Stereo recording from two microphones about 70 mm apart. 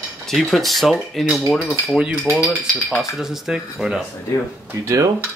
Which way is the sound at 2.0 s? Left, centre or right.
Centre.